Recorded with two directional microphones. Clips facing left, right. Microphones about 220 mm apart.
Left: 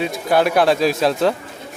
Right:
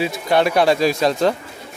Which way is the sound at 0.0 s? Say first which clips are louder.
Even; centre (ahead or behind).